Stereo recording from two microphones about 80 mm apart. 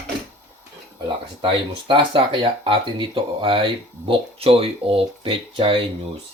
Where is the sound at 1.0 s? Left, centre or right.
Right.